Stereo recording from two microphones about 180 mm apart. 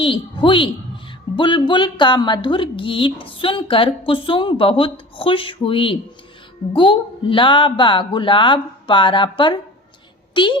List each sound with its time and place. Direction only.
0.0 s speech: 30° left (ahead or behind)